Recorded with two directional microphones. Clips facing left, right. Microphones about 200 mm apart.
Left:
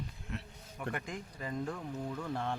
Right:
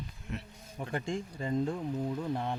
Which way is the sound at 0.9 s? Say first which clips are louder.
Right 8 dB; 30° right (ahead or behind).